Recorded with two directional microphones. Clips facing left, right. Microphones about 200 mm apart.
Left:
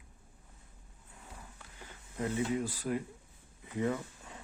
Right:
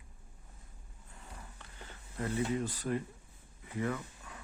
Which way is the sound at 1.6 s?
10° left (ahead or behind).